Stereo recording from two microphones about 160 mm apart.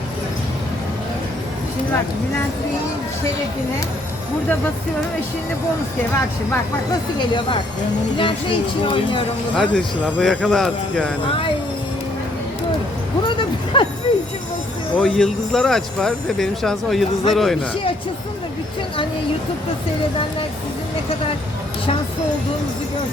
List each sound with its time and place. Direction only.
7.2 s speech: 30° left (ahead or behind)
9.6 s speech: 5° left (ahead or behind)
11.3 s speech: 30° left (ahead or behind)
13.2 s a sound: 30° left (ahead or behind)
14.1 s speech: 30° left (ahead or behind)
14.9 s speech: 5° left (ahead or behind)